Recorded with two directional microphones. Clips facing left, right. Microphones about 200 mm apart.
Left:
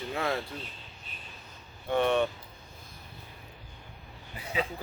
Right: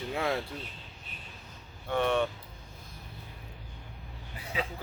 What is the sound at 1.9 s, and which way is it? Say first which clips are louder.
Speech: left 2 dB; 20° left (ahead or behind).